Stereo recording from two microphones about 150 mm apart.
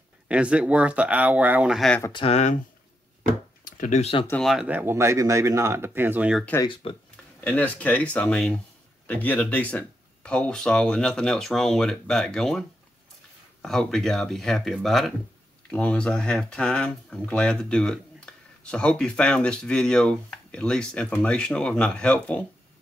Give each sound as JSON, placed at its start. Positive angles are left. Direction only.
{"t": 0.3, "sound": "speech", "side_deg": -5}
{"t": 2.1, "sound": "speech", "side_deg": 45}
{"t": 3.6, "sound": "a sound", "side_deg": 60}
{"t": 4.3, "sound": "speech", "side_deg": 0}
{"t": 4.6, "sound": "speech", "side_deg": -15}
{"t": 6.6, "sound": "speech", "side_deg": 35}
{"t": 7.3, "sound": "speech", "side_deg": 10}